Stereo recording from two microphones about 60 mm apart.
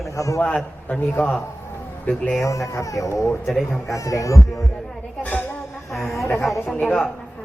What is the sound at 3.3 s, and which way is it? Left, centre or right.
Speech, centre.